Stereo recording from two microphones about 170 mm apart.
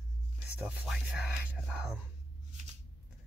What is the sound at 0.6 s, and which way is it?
Speech, 5° right (ahead or behind).